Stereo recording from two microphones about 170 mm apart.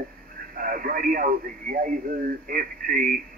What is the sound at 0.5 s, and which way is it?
Speech, 55° right (ahead or behind).